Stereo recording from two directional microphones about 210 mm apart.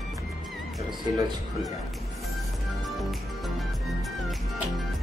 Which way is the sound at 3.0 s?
Centre (ahead or behind).